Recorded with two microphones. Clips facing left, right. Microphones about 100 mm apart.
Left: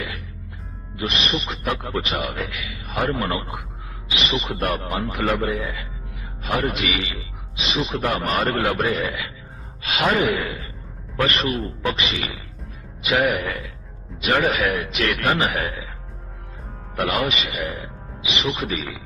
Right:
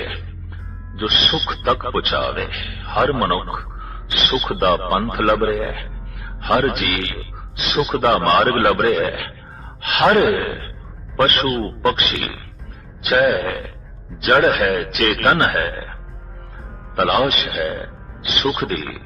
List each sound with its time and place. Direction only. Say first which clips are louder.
0.9 s a man's voice: right 3 dB; 55° right (ahead or behind)
5.7 s a man's voice: right 1 dB; 65° right (ahead or behind); by 14.8 s 40° right (ahead or behind)
14.8 s a man's voice: right 4 dB; 60° right (ahead or behind)
16.9 s a man's voice: right 6 dB; 55° right (ahead or behind)